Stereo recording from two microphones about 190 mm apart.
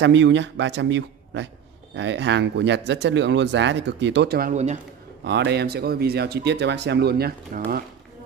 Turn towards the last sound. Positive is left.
turn(degrees=-50)  # may be behind; listen again after turning